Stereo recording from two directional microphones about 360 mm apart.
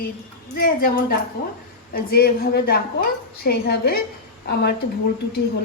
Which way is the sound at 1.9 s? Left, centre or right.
Left.